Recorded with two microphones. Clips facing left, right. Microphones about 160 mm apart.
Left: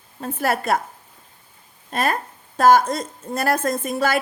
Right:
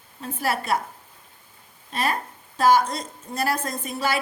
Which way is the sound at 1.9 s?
50° left (ahead or behind).